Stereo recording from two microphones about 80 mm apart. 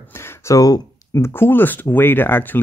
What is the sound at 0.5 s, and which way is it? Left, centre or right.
Speech, left.